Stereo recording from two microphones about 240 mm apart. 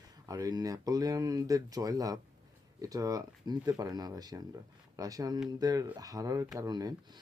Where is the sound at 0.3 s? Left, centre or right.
Centre.